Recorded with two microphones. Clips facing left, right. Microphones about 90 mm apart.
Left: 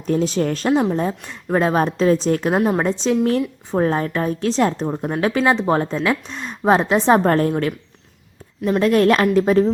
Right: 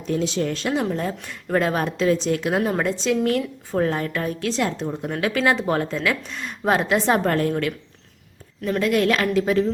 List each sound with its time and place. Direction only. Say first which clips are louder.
0.1 s speech: left 4 dB; 40° left (ahead or behind)
0.9 s a woman's voice: left 4 dB; 25° left (ahead or behind); by 5.1 s 40° left (ahead or behind)
5.4 s a woman's voice: left 3 dB; 25° left (ahead or behind)
8.8 s a woman's voice: left 5 dB; 40° left (ahead or behind)